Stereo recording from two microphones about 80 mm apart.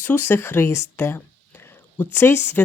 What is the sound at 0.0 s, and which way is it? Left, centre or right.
Speech, left.